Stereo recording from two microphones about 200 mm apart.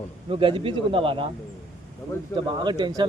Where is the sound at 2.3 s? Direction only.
25° right (ahead or behind).